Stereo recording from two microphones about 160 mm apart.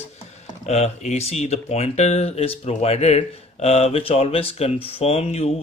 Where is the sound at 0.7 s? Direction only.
45° left (ahead or behind).